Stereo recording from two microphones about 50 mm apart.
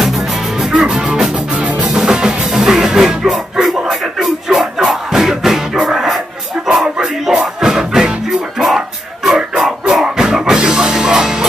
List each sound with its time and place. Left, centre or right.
0.0 s music: centre
1.6 s music: right
2.0 s music: centre